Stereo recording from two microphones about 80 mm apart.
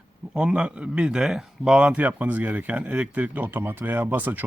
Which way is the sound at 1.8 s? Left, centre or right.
Centre.